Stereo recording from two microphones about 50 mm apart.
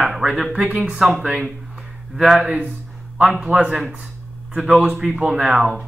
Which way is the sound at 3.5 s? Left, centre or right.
Right.